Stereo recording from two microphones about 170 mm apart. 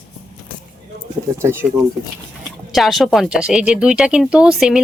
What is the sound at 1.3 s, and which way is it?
Speech, 15° right (ahead or behind).